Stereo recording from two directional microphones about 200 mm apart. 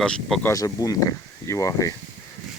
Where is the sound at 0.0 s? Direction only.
5° left (ahead or behind).